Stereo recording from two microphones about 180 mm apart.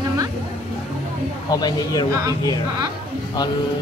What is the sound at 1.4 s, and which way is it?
Speech, 20° left (ahead or behind).